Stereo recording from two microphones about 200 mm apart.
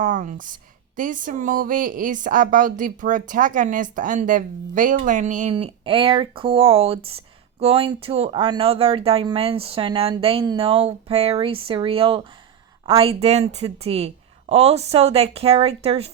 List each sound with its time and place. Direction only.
0.0 s speech: 40° right (ahead or behind)